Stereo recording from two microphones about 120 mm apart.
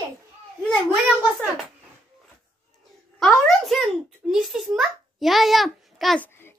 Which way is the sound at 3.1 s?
5° left (ahead or behind).